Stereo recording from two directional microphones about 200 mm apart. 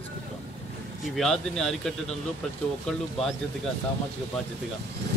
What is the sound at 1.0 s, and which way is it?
Speech, centre (ahead or behind).